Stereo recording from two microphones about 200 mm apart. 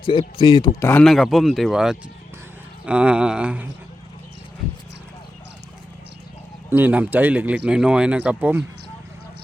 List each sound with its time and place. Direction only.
0.0 s speech: 25° left (ahead or behind)
0.8 s speech: 10° left (ahead or behind)
6.7 s speech: 10° right (ahead or behind)